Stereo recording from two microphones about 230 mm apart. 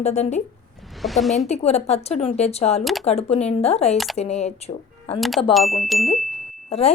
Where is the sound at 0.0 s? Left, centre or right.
Left.